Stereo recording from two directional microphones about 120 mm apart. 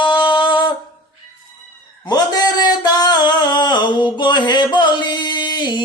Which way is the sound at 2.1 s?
35° left (ahead or behind).